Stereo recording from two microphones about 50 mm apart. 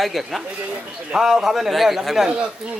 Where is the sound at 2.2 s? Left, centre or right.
Centre.